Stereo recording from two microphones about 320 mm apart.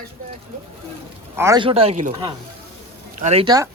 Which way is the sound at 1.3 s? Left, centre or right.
Centre.